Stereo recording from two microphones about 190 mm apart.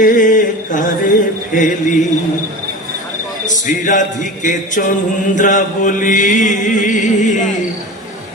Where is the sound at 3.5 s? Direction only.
40° left (ahead or behind).